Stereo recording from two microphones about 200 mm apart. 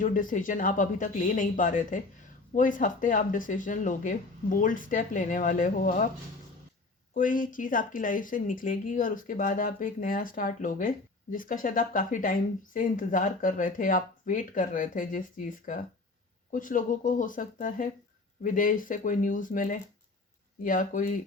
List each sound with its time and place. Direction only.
0.0 s speech: 40° left (ahead or behind)
7.1 s speech: 40° left (ahead or behind)